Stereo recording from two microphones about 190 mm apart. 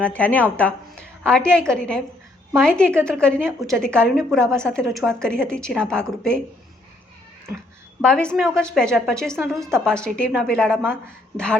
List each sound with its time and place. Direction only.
0.0 s a woman's voice: 5° left (ahead or behind)
8.0 s a woman's voice: 5° left (ahead or behind)